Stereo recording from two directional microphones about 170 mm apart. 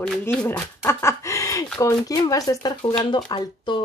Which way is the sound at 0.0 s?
10° left (ahead or behind).